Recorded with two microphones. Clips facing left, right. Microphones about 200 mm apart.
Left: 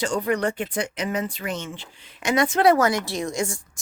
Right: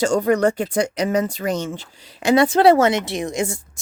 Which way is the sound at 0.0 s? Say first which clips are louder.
Right 6 dB; 45° right (ahead or behind).